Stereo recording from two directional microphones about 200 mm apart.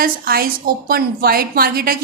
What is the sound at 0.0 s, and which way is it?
A woman's voice, 45° right (ahead or behind).